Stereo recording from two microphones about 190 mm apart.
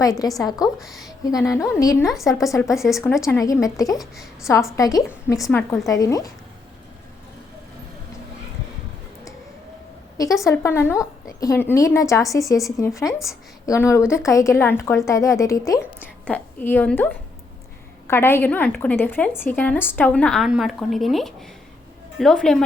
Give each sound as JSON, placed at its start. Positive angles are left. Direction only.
{"t": 0.0, "sound": "a woman's voice", "side_deg": 20}
{"t": 0.8, "sound": "a woman's voice", "side_deg": 0}
{"t": 1.5, "sound": "a woman's voice", "side_deg": 15}
{"t": 3.9, "sound": "a woman's voice", "side_deg": 0}
{"t": 4.4, "sound": "a woman's voice", "side_deg": 15}
{"t": 10.4, "sound": "a woman's voice", "side_deg": 15}
{"t": 13.1, "sound": "a woman's voice", "side_deg": 0}
{"t": 13.7, "sound": "a woman's voice", "side_deg": 15}
{"t": 18.1, "sound": "a woman's voice", "side_deg": 10}